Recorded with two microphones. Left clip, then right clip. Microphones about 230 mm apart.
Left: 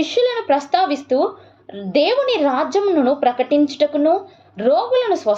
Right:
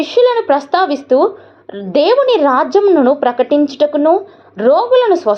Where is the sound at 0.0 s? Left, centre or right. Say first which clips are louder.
Right 7 dB; centre.